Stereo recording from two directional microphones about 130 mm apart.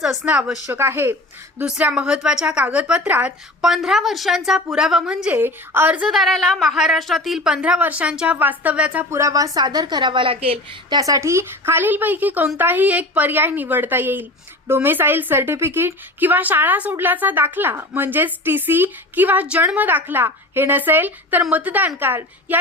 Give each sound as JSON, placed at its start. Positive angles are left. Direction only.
{"t": 0.0, "sound": "speech", "side_deg": 0}
{"t": 0.7, "sound": "a woman's voice", "side_deg": -15}
{"t": 10.8, "sound": "a woman's voice", "side_deg": -30}